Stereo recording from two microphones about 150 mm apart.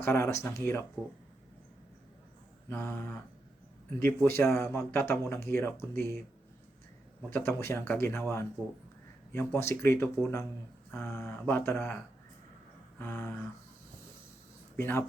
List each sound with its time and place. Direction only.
0.0 s speech: 15° left (ahead or behind)
2.6 s speech: 15° left (ahead or behind)
7.3 s speech: 15° left (ahead or behind)
14.8 s speech: 15° left (ahead or behind)